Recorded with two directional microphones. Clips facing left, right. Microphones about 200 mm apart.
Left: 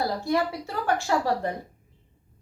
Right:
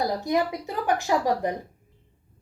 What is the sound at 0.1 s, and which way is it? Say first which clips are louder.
A woman's voice: right 1 dB; 20° right (ahead or behind).